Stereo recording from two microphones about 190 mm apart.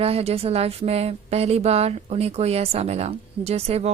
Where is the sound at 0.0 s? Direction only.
30° right (ahead or behind).